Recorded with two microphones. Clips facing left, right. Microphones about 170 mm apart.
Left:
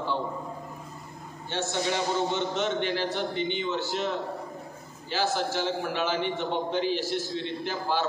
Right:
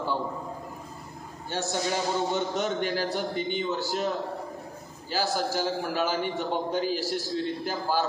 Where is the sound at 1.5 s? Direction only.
40° right (ahead or behind).